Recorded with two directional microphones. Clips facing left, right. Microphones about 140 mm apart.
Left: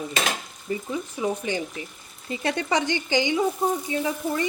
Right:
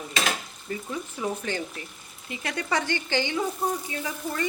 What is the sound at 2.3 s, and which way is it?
Frying, 30° left (ahead or behind).